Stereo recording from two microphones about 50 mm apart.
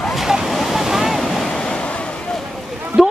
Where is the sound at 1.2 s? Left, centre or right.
Centre.